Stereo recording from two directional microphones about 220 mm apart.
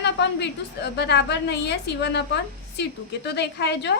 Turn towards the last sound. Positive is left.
turn(degrees=50)  # may be behind; listen again after turning